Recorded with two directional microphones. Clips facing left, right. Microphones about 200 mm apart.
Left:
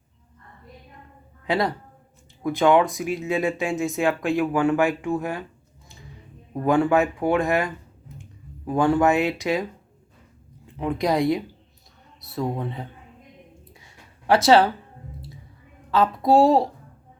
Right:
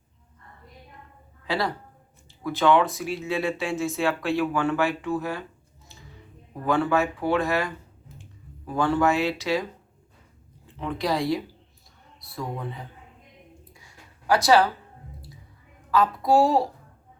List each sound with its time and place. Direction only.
1.5 s a woman's voice: 20° left (ahead or behind)
6.5 s speech: 15° left (ahead or behind)
10.8 s a woman's voice: 15° left (ahead or behind)
14.3 s a woman's voice: 25° left (ahead or behind)
15.9 s a woman's voice: 25° left (ahead or behind)